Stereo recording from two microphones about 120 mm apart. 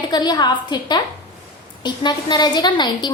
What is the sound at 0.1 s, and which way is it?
A woman's voice, 35° left (ahead or behind).